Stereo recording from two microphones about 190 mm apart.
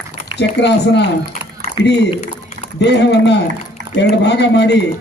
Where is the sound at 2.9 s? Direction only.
65° left (ahead or behind).